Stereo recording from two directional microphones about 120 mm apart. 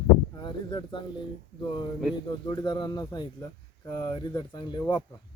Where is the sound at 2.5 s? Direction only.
35° left (ahead or behind).